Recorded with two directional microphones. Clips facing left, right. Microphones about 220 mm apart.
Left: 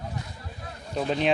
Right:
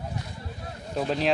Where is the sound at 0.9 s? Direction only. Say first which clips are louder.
Left 1 dB; centre (ahead or behind).